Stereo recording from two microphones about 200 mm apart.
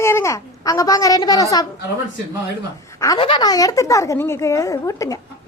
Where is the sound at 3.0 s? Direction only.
20° left (ahead or behind).